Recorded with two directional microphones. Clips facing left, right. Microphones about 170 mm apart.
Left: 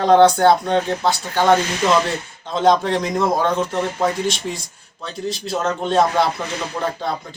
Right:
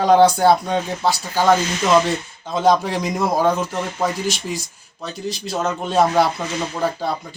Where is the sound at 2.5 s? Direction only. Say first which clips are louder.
Left 1 dB; 5° right (ahead or behind).